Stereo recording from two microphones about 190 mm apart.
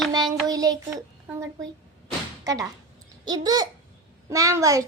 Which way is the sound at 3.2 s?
20° right (ahead or behind).